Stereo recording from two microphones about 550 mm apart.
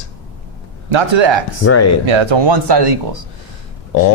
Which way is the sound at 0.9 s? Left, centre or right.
Right.